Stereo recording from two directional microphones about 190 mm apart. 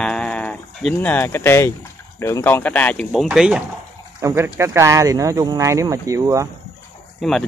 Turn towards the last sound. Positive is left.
turn(degrees=0)  # may be behind; listen again after turning